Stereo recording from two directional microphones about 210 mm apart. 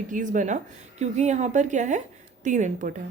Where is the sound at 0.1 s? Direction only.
35° right (ahead or behind).